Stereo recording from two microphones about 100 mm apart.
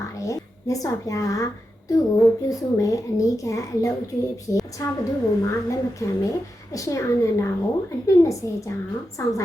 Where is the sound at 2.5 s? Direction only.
35° left (ahead or behind).